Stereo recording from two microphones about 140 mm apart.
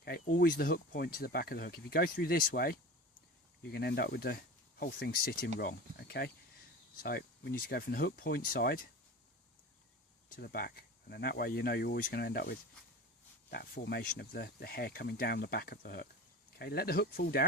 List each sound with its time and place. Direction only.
0.1 s speech: 85° left
4.0 s speech: 90° left
7.0 s speech: 90° left
10.3 s speech: 90° left